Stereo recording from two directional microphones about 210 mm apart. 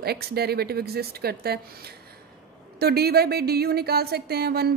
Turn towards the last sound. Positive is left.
turn(degrees=-50)  # may be behind; listen again after turning